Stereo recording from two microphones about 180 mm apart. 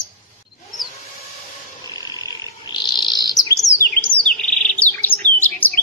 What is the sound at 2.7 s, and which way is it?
Bird, 25° left (ahead or behind).